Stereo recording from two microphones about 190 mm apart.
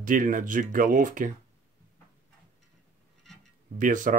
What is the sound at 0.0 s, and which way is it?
Speech, 45° right (ahead or behind).